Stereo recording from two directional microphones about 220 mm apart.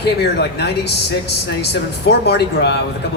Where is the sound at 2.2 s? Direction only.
50° left (ahead or behind).